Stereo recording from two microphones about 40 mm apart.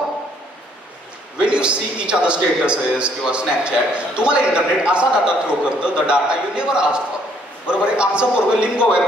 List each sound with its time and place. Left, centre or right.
1.4 s a man's voice: right